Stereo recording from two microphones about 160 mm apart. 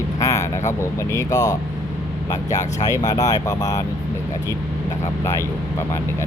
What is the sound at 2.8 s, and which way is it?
Speech, 25° left (ahead or behind).